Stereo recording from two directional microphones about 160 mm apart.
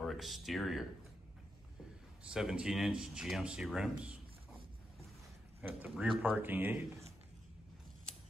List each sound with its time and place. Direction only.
0.0 s speech: centre (ahead or behind)
2.2 s a man's voice: 5° right (ahead or behind)
5.6 s speech: 10° right (ahead or behind)